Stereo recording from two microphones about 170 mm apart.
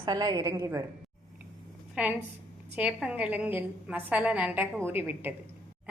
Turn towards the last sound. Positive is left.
turn(degrees=-10)  # may be behind; listen again after turning